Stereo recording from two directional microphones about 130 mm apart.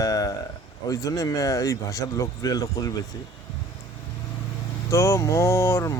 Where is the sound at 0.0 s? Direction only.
25° left (ahead or behind).